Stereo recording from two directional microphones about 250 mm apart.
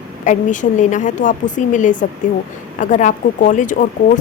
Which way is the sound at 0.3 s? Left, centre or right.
Left.